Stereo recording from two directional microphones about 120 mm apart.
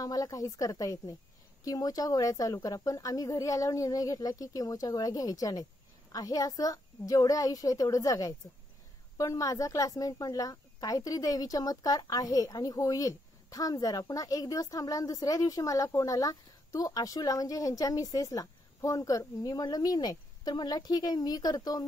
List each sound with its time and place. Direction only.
0.0 s a woman's voice: 30° left (ahead or behind)